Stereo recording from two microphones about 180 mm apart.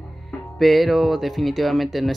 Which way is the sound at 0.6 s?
Centre (ahead or behind).